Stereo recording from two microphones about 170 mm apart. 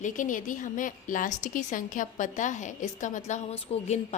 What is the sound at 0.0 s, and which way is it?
A woman's voice, 50° left (ahead or behind).